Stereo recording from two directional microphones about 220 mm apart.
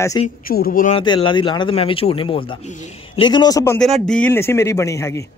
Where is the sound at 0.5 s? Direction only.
40° left (ahead or behind).